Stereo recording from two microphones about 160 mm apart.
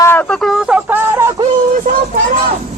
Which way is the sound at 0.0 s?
10° left (ahead or behind).